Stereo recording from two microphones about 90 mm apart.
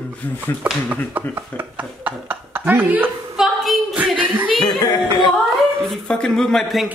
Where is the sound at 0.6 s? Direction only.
15° right (ahead or behind).